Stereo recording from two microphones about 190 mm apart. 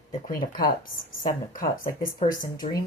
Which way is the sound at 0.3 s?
50° left (ahead or behind).